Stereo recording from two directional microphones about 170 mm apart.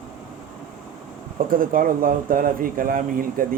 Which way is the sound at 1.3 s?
55° right (ahead or behind).